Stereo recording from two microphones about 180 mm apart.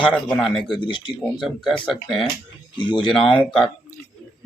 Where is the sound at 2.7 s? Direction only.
25° left (ahead or behind).